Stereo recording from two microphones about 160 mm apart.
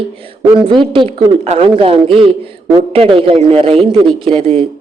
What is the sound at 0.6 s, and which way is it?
A woman's voice, 35° right (ahead or behind).